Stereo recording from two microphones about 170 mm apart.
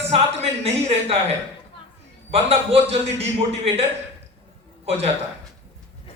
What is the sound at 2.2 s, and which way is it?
A man's voice, 35° right (ahead or behind).